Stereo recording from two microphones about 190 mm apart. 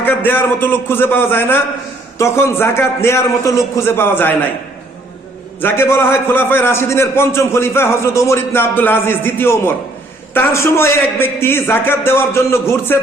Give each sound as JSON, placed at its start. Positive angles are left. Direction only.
{"t": 0.0, "sound": "a man's voice", "side_deg": 10}
{"t": 5.5, "sound": "a man's voice", "side_deg": 10}